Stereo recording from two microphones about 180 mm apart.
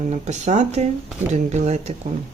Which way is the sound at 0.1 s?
40° right (ahead or behind).